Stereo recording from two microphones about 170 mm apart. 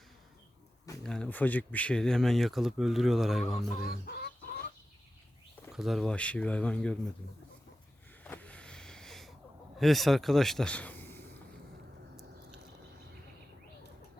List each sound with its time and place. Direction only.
1.0 s speech: 5° left (ahead or behind)
3.8 s speech: 60° left (ahead or behind)
5.7 s speech: centre (ahead or behind)
8.2 s vehicle: 10° left (ahead or behind)
9.7 s speech: centre (ahead or behind)